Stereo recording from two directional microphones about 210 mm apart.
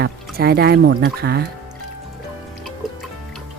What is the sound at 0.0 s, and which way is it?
Speech, 50° right (ahead or behind).